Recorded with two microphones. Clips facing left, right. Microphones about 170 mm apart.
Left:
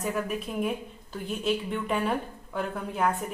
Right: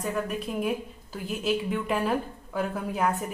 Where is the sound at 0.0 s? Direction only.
Centre (ahead or behind).